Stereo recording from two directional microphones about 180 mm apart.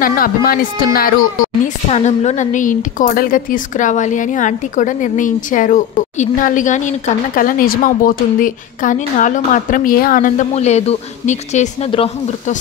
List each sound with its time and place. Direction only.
0.0 s a woman's voice: 55° left (ahead or behind)
1.9 s a woman's voice: 35° left (ahead or behind)